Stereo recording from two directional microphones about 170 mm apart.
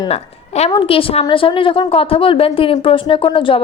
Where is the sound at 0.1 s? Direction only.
40° left (ahead or behind).